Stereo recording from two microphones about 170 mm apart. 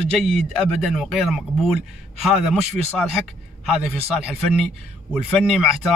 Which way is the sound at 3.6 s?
Centre (ahead or behind).